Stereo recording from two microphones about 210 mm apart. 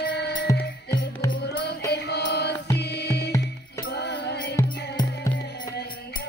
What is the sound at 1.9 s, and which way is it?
Music, 50° left (ahead or behind).